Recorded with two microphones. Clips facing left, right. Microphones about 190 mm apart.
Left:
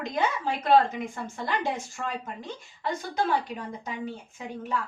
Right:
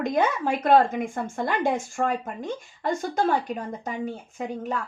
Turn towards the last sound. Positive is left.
turn(degrees=-50)  # may be behind; listen again after turning